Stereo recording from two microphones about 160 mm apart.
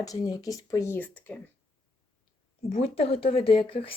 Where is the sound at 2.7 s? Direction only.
40° left (ahead or behind).